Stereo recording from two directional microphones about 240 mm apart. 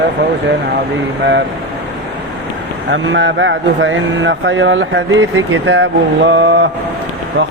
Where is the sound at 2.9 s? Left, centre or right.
Right.